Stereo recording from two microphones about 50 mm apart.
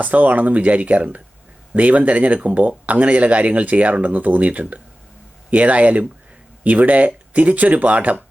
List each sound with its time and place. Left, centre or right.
0.0 s speech: right